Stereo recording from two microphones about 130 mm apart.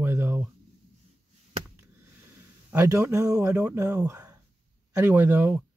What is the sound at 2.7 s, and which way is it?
Speech, 20° right (ahead or behind).